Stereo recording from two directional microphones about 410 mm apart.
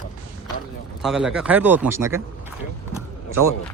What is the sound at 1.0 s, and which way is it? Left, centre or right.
Speech, centre.